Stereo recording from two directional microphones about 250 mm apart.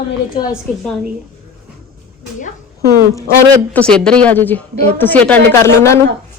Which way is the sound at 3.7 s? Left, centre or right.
Centre.